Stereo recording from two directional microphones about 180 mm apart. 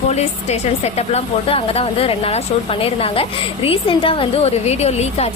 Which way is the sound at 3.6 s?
30° left (ahead or behind).